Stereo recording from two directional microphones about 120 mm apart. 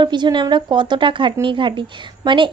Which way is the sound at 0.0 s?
40° right (ahead or behind).